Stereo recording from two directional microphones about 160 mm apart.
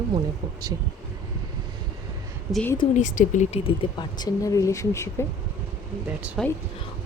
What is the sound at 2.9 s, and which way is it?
Speech, 50° left (ahead or behind).